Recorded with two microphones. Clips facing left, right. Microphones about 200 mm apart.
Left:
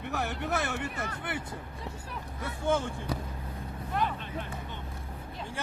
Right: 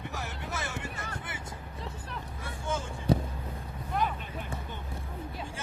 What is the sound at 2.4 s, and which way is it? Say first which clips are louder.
Speech: left 7 dB; 60° left (ahead or behind).